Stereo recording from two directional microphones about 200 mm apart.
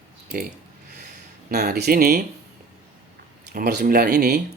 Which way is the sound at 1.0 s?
55° right (ahead or behind).